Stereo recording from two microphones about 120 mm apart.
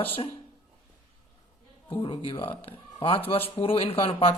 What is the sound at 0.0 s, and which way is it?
Speech, 50° left (ahead or behind).